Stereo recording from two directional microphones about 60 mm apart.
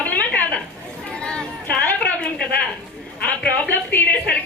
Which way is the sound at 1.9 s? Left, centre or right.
Left.